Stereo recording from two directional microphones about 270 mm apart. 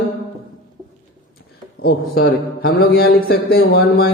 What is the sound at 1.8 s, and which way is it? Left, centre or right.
A man's voice, left.